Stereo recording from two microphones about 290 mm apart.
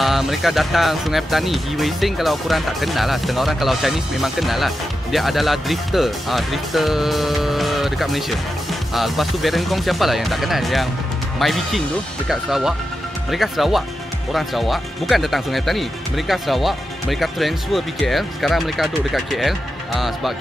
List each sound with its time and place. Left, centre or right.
0.0 s speech: centre